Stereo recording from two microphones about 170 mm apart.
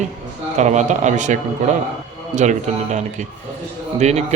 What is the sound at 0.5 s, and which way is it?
A man's voice, 45° right (ahead or behind).